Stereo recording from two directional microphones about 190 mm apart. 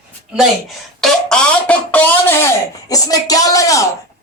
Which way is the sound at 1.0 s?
5° left (ahead or behind).